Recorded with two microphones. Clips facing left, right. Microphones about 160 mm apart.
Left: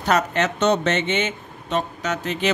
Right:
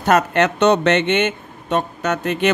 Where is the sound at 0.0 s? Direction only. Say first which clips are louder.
Right 5 dB; 55° right (ahead or behind).